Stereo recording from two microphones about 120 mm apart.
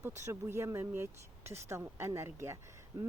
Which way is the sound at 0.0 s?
25° right (ahead or behind).